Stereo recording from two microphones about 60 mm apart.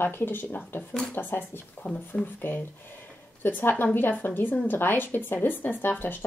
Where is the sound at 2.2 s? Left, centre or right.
Centre.